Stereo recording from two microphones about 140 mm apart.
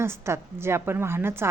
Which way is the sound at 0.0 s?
20° right (ahead or behind).